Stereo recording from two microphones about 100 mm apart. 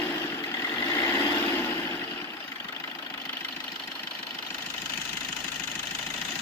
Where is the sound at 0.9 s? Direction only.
25° left (ahead or behind).